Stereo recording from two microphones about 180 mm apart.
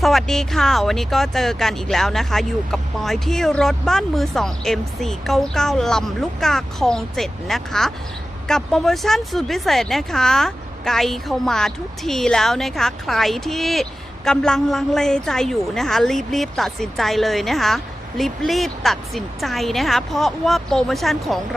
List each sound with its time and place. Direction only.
0.0 s speech: centre (ahead or behind)